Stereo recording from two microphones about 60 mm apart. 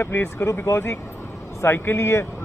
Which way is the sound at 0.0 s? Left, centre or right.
Left.